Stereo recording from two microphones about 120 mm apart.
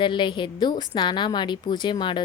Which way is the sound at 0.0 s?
40° left (ahead or behind).